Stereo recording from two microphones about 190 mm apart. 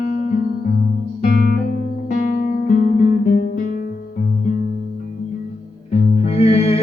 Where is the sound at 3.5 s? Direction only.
40° left (ahead or behind).